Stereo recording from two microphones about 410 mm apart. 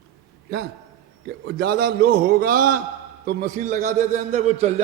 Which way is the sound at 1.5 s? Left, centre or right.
Right.